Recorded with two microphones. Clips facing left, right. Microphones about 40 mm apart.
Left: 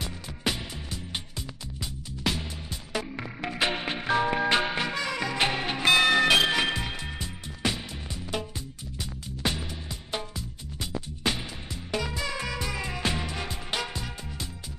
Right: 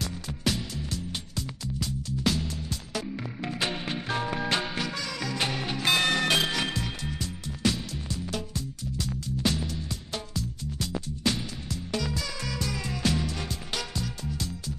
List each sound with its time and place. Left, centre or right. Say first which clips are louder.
0.0 s music: right 1 dB; left
6.2 s music: left 4 dB; left
6.5 s music: left 3 dB; left